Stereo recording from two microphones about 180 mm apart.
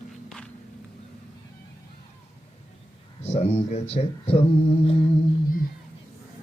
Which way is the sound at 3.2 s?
35° left (ahead or behind).